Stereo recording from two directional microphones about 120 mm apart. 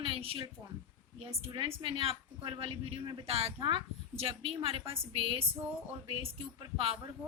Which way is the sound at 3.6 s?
45° right (ahead or behind).